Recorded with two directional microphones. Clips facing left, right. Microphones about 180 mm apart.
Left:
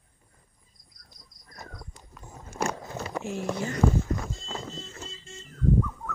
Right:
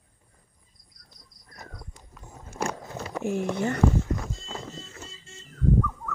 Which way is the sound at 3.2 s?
55° right (ahead or behind).